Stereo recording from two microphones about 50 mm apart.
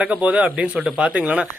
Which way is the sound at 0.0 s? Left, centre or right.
Right.